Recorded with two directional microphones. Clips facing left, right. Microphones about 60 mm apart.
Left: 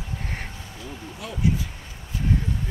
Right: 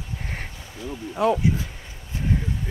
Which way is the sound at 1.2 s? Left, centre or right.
Right.